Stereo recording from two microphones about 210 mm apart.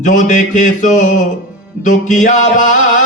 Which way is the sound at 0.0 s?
35° left (ahead or behind).